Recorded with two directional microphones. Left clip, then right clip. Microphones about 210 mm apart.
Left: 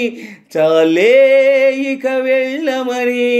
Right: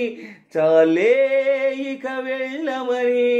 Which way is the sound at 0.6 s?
35° left (ahead or behind).